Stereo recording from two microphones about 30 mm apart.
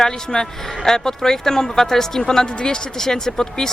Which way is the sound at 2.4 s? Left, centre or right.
Left.